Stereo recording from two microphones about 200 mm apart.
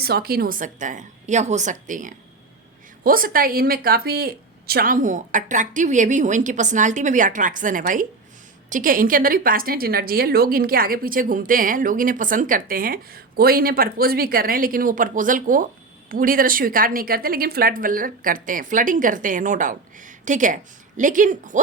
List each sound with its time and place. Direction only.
0.0 s a woman's voice: 50° right (ahead or behind)